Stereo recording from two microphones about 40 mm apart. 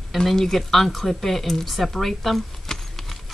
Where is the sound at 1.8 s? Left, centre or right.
Centre.